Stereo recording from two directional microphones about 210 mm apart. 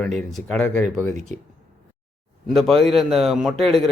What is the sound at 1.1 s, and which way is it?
Speech, 35° right (ahead or behind).